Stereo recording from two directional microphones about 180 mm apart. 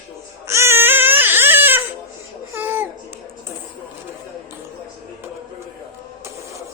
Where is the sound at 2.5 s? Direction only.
10° right (ahead or behind).